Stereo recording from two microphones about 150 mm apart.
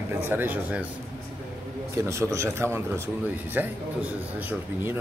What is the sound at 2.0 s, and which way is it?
A man's voice, 20° right (ahead or behind).